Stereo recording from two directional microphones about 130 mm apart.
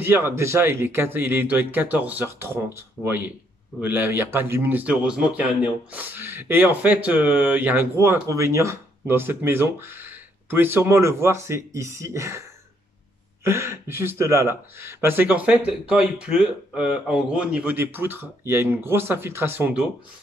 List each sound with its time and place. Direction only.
0.0 s speech: 15° right (ahead or behind)